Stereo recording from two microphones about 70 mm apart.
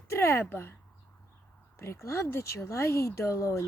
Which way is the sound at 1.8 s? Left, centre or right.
Left.